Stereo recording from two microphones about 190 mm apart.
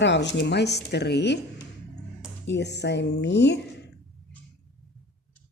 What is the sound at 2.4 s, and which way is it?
Speech, 65° left (ahead or behind).